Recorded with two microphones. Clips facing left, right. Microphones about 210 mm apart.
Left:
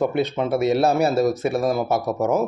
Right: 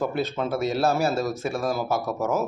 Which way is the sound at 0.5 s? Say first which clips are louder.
Left 6 dB; 65° left (ahead or behind).